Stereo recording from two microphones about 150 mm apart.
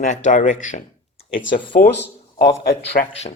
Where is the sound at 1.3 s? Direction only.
35° left (ahead or behind).